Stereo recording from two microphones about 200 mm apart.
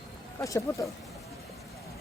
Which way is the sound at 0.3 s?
15° left (ahead or behind).